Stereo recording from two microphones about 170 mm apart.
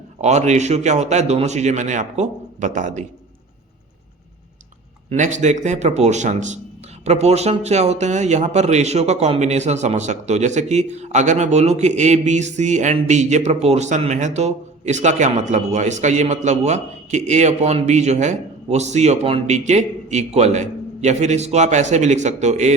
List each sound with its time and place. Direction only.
0.2 s a man's voice: 40° right (ahead or behind)
5.0 s a man's voice: 45° right (ahead or behind)